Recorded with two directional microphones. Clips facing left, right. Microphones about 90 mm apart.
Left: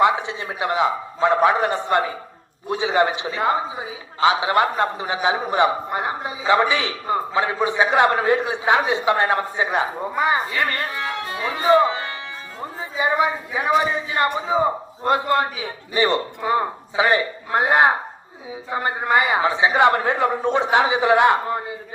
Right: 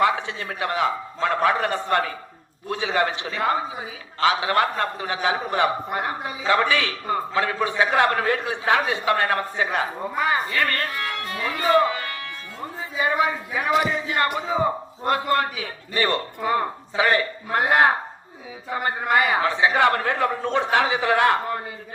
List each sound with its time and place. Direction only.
0.0 s a man's voice: 20° left (ahead or behind)